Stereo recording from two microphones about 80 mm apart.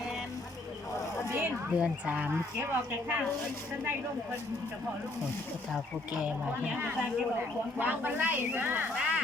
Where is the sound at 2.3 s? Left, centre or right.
Right.